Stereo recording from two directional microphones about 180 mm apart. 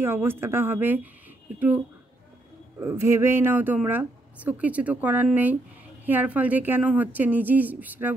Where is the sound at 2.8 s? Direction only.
15° right (ahead or behind).